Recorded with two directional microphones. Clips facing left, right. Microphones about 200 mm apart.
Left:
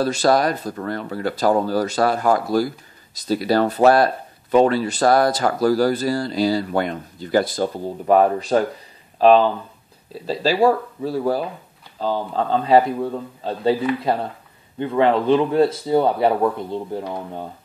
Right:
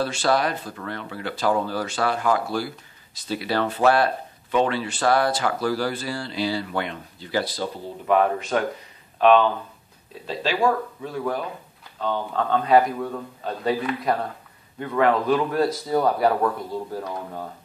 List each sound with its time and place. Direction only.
0.0 s speech: 40° left (ahead or behind); by 17.1 s 25° left (ahead or behind)